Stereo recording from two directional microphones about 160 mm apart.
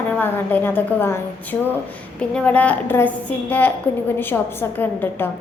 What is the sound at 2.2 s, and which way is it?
A woman's voice, 10° left (ahead or behind).